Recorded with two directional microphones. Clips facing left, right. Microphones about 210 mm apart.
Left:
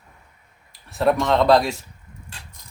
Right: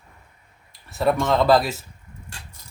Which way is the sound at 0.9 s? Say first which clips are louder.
Left 1 dB; centre (ahead or behind).